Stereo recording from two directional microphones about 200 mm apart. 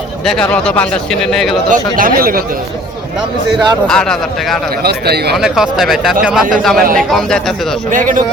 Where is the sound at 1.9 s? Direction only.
45° right (ahead or behind).